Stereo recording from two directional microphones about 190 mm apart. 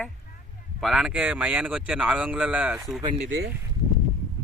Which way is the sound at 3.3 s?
60° right (ahead or behind).